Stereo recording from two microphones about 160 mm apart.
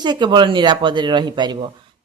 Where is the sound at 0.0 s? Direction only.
30° right (ahead or behind).